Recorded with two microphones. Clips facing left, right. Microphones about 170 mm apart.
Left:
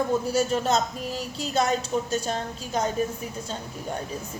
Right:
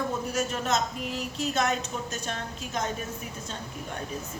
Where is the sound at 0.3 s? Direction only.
30° left (ahead or behind).